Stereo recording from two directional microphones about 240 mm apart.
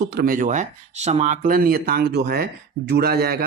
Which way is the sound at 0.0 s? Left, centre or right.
Right.